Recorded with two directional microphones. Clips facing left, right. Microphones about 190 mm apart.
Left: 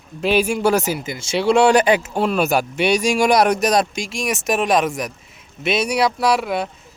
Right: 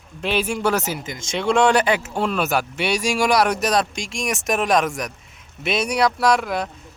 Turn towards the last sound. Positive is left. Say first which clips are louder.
# left 1 dB
turn(degrees=5)  # may be behind; listen again after turning